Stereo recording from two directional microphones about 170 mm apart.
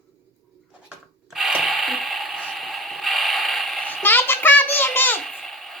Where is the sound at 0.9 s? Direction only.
5° right (ahead or behind).